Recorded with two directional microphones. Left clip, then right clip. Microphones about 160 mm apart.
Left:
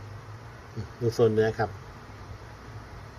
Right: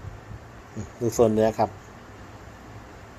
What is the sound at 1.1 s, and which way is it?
Speech, 40° right (ahead or behind).